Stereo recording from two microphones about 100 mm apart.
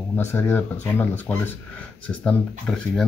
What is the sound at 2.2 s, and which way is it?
Speech, 10° left (ahead or behind).